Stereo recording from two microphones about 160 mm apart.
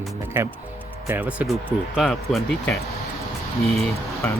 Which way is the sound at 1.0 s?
10° right (ahead or behind).